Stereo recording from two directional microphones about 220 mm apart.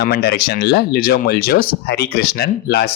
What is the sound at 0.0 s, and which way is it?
Speech, 45° left (ahead or behind).